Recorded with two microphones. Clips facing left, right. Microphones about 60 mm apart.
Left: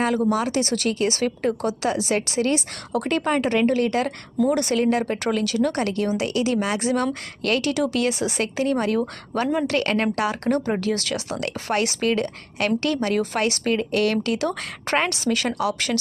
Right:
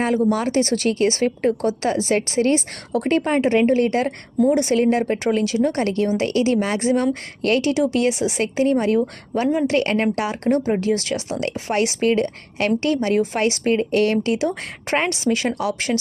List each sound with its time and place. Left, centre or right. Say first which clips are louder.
0.3 s speech: right 3 dB; right